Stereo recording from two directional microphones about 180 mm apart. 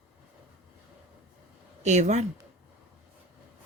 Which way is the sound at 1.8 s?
40° right (ahead or behind).